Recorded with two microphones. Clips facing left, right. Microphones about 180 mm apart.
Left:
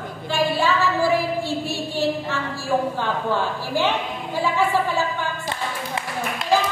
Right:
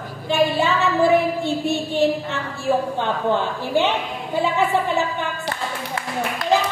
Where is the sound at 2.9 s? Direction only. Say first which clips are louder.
Right 2 dB; 20° right (ahead or behind).